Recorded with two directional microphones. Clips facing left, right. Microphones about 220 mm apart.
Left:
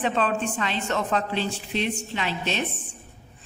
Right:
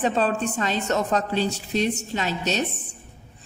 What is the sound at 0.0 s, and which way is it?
A woman's voice, 40° right (ahead or behind).